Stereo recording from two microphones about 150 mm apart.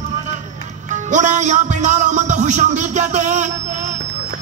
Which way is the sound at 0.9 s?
55° right (ahead or behind).